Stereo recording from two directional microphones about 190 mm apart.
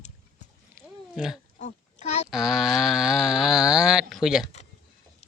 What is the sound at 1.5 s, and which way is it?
Oink, 40° left (ahead or behind).